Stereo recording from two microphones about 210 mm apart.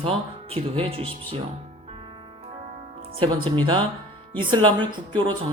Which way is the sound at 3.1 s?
25° right (ahead or behind).